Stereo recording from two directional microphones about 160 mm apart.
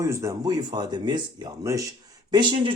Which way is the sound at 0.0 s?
20° right (ahead or behind).